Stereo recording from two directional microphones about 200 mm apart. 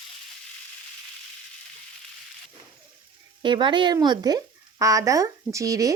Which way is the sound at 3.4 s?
25° right (ahead or behind).